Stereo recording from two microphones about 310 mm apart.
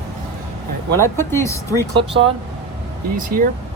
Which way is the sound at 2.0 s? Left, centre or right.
Centre.